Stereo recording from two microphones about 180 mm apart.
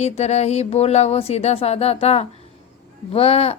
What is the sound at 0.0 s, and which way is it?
Speech, 35° left (ahead or behind).